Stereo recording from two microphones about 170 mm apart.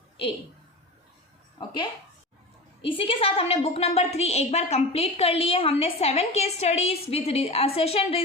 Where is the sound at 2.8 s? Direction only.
30° left (ahead or behind).